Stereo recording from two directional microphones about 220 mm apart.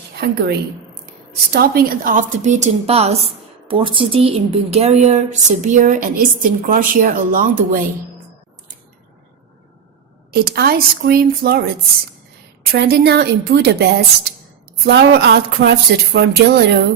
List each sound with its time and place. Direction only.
0.2 s speech: 50° right (ahead or behind)
1.5 s a woman's voice: 45° right (ahead or behind)
10.3 s speech: 45° right (ahead or behind)
12.7 s speech: 50° right (ahead or behind)